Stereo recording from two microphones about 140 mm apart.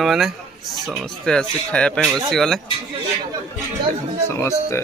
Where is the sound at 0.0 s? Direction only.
Centre (ahead or behind).